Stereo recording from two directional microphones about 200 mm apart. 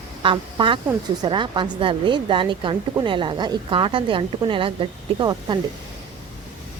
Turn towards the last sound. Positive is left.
turn(degrees=-20)  # may be behind; listen again after turning